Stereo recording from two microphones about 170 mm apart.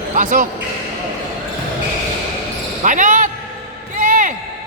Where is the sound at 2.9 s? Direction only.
50° right (ahead or behind).